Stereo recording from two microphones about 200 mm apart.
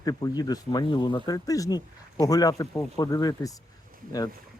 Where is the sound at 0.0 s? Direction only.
20° left (ahead or behind).